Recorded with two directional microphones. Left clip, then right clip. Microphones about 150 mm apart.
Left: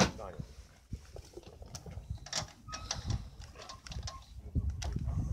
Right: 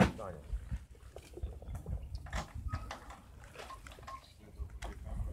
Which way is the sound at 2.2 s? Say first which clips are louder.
Left 4 dB; 50° left (ahead or behind).